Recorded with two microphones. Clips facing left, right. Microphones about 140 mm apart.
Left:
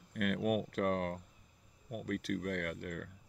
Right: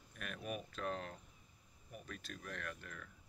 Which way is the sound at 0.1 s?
75° left (ahead or behind).